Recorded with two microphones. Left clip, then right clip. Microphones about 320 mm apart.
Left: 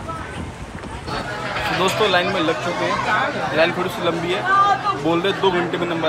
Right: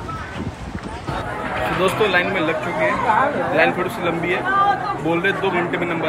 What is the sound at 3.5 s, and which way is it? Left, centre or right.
Speech, centre.